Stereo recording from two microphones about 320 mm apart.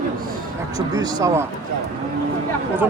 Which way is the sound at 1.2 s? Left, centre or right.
Centre.